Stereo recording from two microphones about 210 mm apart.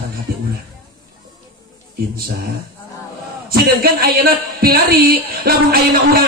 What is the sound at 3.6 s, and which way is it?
Speech, 45° right (ahead or behind).